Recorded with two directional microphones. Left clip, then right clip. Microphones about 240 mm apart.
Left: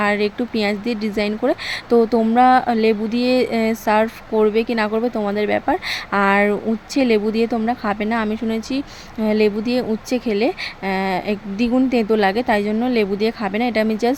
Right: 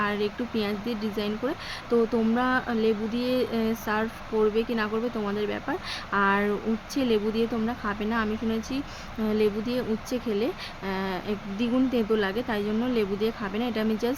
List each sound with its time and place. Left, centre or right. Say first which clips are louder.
0.0 s speech: left 9 dB; left